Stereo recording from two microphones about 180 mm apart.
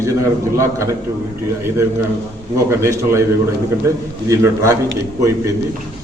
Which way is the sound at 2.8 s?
15° right (ahead or behind).